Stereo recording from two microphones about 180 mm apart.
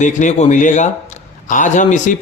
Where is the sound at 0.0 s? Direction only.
40° left (ahead or behind).